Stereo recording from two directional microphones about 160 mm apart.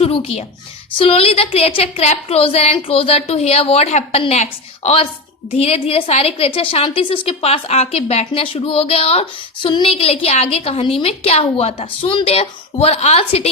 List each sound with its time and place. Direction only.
0.0 s a woman's voice: 35° left (ahead or behind)